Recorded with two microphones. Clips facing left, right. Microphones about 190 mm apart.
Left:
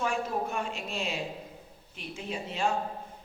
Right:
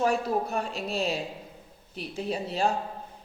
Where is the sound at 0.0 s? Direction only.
40° right (ahead or behind).